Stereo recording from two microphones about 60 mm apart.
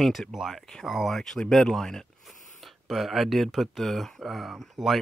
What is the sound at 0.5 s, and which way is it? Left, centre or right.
Speech, centre.